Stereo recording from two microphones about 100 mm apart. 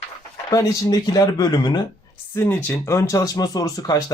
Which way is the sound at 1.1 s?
40° left (ahead or behind).